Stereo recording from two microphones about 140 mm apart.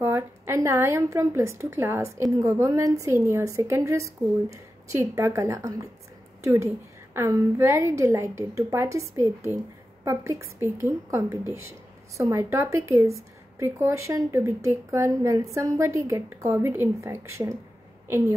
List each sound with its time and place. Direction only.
0.0 s a woman's voice: 20° right (ahead or behind)